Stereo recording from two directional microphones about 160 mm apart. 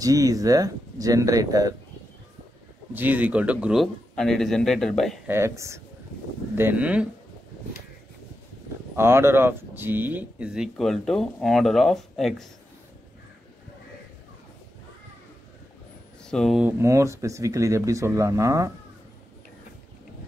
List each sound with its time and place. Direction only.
0.0 s speech: 20° right (ahead or behind)
2.9 s speech: 10° right (ahead or behind)
5.2 s speech: 15° right (ahead or behind)
8.9 s speech: 15° right (ahead or behind); by 12.4 s centre (ahead or behind)
16.3 s speech: centre (ahead or behind)
16.6 s speech: 15° right (ahead or behind)